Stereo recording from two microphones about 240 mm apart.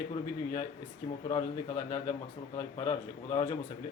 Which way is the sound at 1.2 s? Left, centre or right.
Left.